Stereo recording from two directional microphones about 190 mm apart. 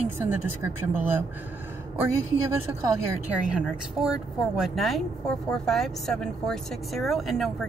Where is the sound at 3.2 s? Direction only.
5° right (ahead or behind).